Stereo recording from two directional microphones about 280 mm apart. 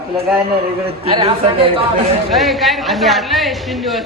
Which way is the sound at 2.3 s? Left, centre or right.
Centre.